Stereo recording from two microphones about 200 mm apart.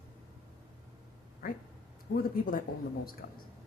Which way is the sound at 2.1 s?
65° left (ahead or behind).